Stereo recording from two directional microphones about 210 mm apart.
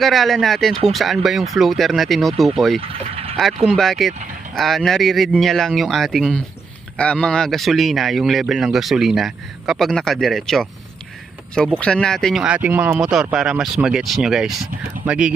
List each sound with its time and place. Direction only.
0.0 s speech: centre (ahead or behind)
2.8 s vehicle: 30° right (ahead or behind)
3.7 s speech: centre (ahead or behind)